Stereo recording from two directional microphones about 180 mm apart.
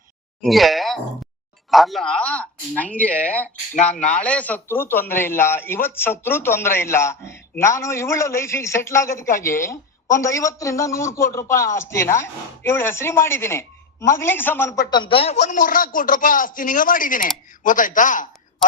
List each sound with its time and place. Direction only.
0.4 s a man's voice: centre (ahead or behind)
14.9 s speech: 30° left (ahead or behind); by 18.3 s 45° left (ahead or behind)